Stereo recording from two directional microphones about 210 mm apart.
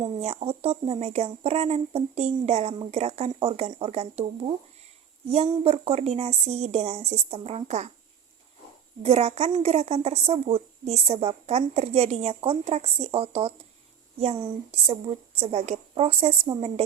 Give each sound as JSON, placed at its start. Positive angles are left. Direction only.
{"t": 0.0, "sound": "a woman's voice", "side_deg": -30}
{"t": 5.3, "sound": "speech", "side_deg": -30}
{"t": 9.0, "sound": "a woman's voice", "side_deg": -30}